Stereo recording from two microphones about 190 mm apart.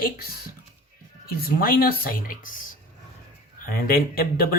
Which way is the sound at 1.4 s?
50° left (ahead or behind).